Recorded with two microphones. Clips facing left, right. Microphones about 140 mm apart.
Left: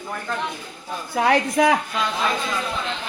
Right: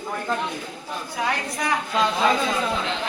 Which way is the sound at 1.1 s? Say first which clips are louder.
Left 8 dB; 70° left (ahead or behind).